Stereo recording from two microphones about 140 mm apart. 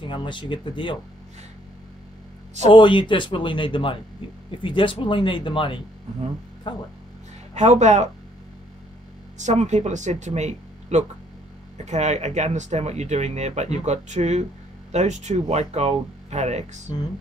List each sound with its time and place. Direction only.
0.0 s speech: 35° left (ahead or behind)
2.7 s speech: 35° left (ahead or behind)
7.5 s speech: 55° right (ahead or behind)
9.4 s speech: 55° right (ahead or behind)